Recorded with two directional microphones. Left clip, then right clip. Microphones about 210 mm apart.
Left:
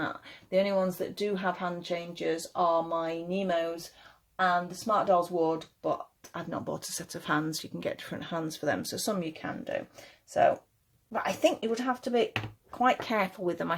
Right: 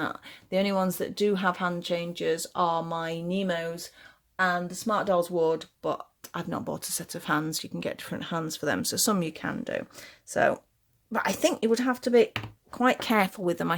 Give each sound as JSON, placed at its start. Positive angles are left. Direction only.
{"t": 0.0, "sound": "speech", "side_deg": -40}